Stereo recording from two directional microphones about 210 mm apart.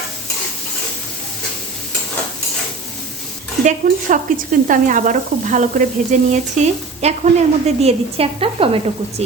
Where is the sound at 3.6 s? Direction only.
40° right (ahead or behind).